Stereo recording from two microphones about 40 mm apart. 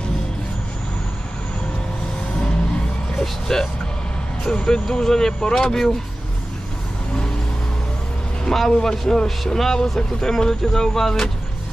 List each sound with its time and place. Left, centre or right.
3.2 s speech: centre
8.5 s speech: centre